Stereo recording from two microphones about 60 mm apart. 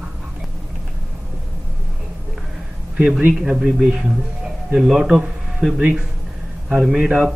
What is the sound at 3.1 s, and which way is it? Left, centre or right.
Speech, right.